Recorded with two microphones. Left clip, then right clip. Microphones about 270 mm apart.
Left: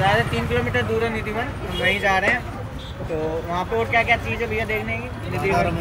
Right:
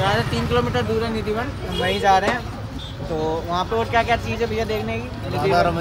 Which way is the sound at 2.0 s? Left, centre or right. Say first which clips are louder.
Right 4 dB; centre.